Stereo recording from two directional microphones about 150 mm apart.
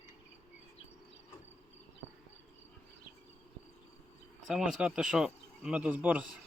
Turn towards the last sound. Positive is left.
turn(degrees=-10)  # may be behind; listen again after turning